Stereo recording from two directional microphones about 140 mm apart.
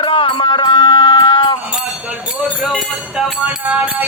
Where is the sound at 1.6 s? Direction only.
10° right (ahead or behind).